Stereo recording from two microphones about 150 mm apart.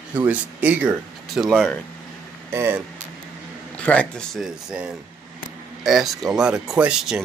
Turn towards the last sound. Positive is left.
turn(degrees=-5)  # may be behind; listen again after turning